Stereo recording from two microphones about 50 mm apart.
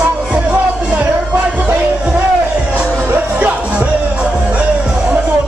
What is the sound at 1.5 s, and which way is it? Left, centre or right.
Music, right.